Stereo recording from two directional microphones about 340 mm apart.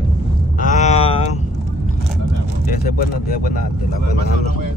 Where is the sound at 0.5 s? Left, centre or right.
Left.